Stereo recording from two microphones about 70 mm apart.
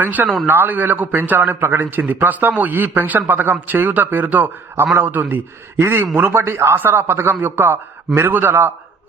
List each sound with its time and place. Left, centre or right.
0.0 s a man's voice: right